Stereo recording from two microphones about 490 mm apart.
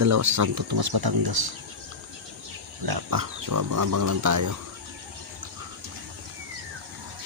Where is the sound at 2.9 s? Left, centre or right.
Right.